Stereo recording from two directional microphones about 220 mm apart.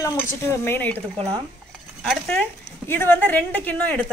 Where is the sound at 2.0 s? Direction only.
5° left (ahead or behind).